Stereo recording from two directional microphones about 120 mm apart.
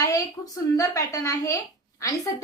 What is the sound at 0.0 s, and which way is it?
A woman's voice, 30° left (ahead or behind).